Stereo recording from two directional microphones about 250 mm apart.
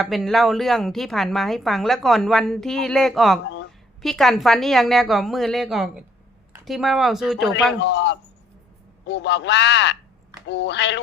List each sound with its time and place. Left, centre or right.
0.0 s a woman's voice: centre
7.8 s a man's voice: left